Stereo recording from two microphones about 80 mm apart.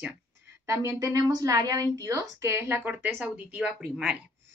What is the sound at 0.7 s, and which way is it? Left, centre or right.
A woman's voice, right.